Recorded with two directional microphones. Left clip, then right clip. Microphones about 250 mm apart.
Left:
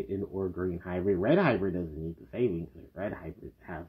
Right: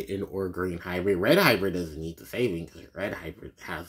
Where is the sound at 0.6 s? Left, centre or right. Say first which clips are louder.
Right 3 dB; centre.